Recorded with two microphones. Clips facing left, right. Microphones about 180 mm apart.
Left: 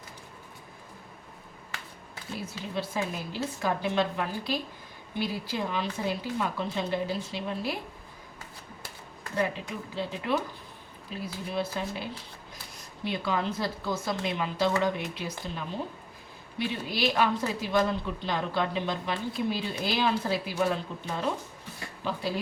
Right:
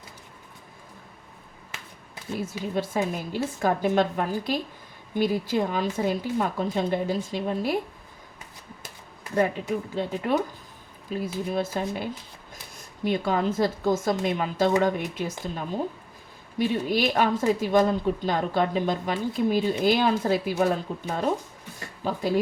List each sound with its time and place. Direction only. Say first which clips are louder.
2.4 s a woman's voice: right 6 dB; 50° right (ahead or behind)
9.9 s a woman's voice: right 2 dB; 45° right (ahead or behind)
21.8 s a sound: right 4 dB; 45° right (ahead or behind)